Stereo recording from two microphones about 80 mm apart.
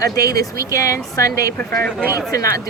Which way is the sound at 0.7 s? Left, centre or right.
Left.